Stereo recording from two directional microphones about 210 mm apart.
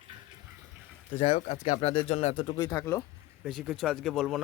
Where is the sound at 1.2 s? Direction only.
35° left (ahead or behind); by 3.0 s 15° left (ahead or behind).